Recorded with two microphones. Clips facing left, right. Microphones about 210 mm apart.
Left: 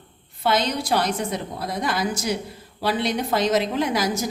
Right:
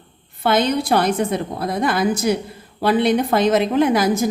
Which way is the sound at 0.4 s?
55° right (ahead or behind).